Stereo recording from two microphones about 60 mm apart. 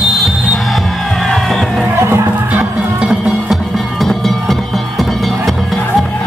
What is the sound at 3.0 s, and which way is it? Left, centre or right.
Music, centre.